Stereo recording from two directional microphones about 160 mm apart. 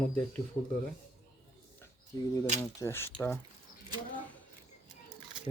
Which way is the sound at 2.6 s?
15° left (ahead or behind).